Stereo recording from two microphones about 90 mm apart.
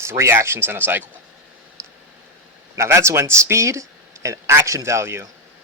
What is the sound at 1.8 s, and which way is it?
Clicking, 30° right (ahead or behind).